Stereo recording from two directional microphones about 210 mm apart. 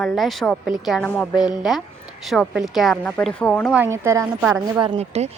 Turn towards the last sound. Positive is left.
turn(degrees=-30)  # may be behind; listen again after turning